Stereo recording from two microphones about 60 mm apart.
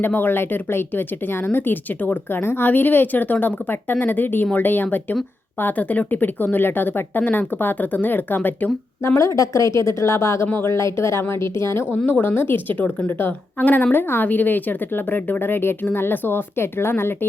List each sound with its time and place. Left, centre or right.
0.0 s a woman's voice: left
9.0 s a woman's voice: left
12.0 s a woman's voice: left
13.6 s a woman's voice: left